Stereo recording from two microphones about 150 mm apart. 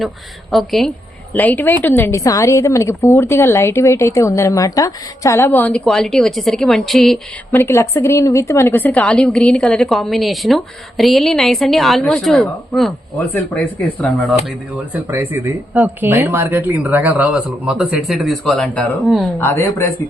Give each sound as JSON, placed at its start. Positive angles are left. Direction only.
{"t": 0.5, "sound": "a woman's voice", "side_deg": 0}
{"t": 7.5, "sound": "a woman's voice", "side_deg": 20}
{"t": 14.9, "sound": "a woman's voice", "side_deg": -15}
{"t": 19.4, "sound": "a woman's voice", "side_deg": 15}